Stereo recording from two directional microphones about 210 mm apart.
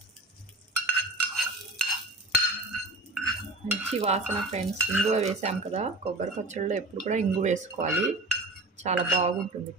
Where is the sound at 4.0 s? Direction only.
30° right (ahead or behind).